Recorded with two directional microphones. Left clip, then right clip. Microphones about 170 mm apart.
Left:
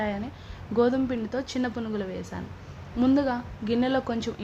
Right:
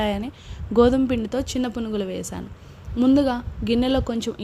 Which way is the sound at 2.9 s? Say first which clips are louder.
Right 5 dB; 35° right (ahead or behind).